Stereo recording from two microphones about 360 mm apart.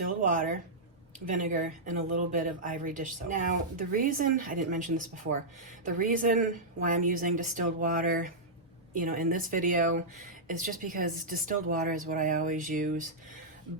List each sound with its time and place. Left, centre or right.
0.2 s speech: right